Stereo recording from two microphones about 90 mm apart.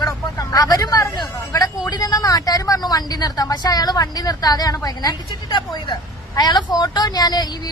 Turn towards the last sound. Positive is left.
turn(degrees=50)  # may be behind; listen again after turning